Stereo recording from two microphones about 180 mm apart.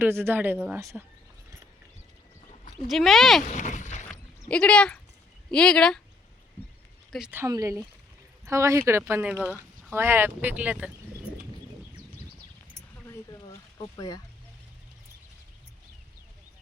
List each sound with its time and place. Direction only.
0.0 s speech: 10° right (ahead or behind)
2.8 s speech: centre (ahead or behind)
3.5 s a sound: 45° left (ahead or behind)
4.4 s speech: 5° left (ahead or behind)
7.1 s speech: 5° right (ahead or behind)
13.9 s speech: 20° left (ahead or behind)